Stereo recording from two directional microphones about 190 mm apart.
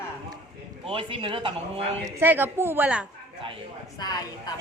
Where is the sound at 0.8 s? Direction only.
30° right (ahead or behind).